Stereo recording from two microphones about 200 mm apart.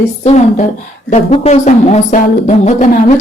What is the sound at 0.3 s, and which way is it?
Music, 35° left (ahead or behind).